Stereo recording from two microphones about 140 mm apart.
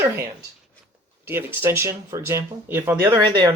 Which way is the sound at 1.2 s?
15° right (ahead or behind).